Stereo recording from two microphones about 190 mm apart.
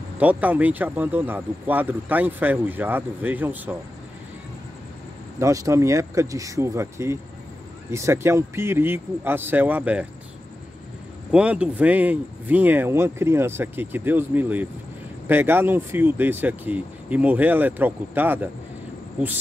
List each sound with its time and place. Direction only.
0.2 s speech: 10° right (ahead or behind)
5.4 s speech: 15° right (ahead or behind)
11.3 s speech: 5° right (ahead or behind)